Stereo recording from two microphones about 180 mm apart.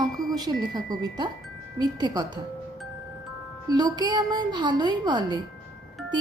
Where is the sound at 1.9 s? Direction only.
25° right (ahead or behind).